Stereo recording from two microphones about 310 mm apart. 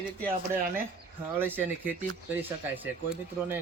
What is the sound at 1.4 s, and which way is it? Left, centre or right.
Speech, centre.